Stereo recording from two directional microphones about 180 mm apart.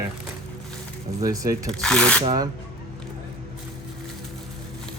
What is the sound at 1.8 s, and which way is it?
Speech, 5° left (ahead or behind).